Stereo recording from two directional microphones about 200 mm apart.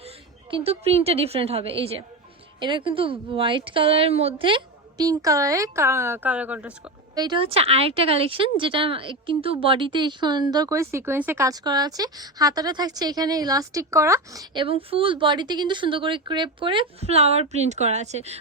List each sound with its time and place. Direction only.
0.5 s speech: 30° right (ahead or behind); by 6.9 s 5° right (ahead or behind)
7.2 s speech: 25° right (ahead or behind)